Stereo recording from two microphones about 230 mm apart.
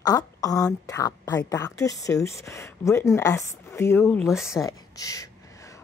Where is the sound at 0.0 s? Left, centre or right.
Centre.